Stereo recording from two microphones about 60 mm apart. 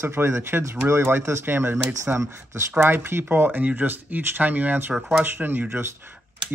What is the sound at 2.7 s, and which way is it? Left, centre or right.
Speech, right.